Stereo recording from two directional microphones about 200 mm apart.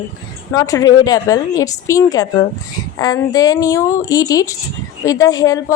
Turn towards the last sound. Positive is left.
turn(degrees=15)  # may be behind; listen again after turning